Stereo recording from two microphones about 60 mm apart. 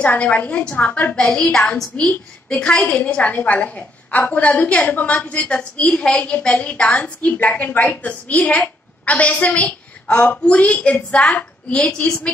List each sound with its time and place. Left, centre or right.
0.0 s a woman's voice: left
3.0 s a woman's voice: left